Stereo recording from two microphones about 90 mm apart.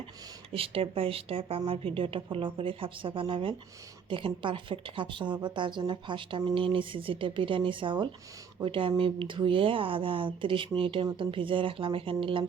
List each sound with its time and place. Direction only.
0.5 s speech: 90° right; by 8.1 s 65° right (ahead or behind)
8.6 s speech: 80° right